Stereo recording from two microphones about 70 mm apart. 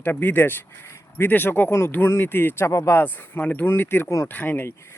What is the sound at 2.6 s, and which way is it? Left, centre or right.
Speech, left.